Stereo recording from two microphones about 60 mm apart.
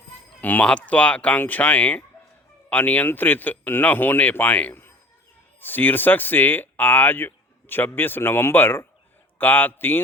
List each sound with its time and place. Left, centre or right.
0.6 s speech: left
4.7 s a sound: left
5.5 s speech: left